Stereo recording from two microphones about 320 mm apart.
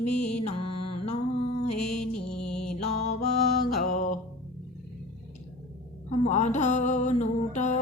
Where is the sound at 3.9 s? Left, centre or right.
Left.